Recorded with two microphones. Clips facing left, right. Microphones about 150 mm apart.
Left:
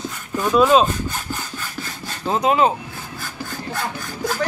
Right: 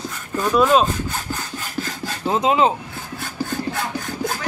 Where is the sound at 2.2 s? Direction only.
20° right (ahead or behind).